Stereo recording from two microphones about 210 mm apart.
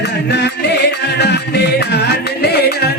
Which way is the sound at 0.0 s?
50° left (ahead or behind).